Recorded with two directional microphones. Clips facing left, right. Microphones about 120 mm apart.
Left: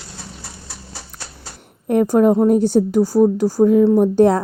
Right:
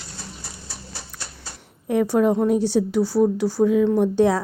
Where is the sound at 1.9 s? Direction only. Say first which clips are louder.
Left 5 dB; 45° left (ahead or behind).